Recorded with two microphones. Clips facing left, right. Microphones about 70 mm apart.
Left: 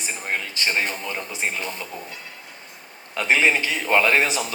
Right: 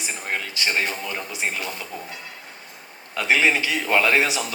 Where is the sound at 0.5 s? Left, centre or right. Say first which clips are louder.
Right 1 dB; left.